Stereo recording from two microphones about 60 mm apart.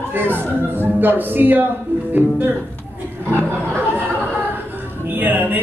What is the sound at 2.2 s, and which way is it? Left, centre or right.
Speech, right.